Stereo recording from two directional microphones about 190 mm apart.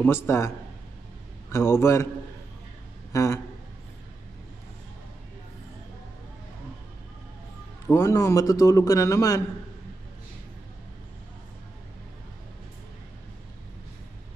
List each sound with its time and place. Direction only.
0.0 s a man's voice: 15° left (ahead or behind)
1.5 s a man's voice: 15° left (ahead or behind)
3.1 s a sound: 15° left (ahead or behind)
7.8 s a man's voice: 15° left (ahead or behind)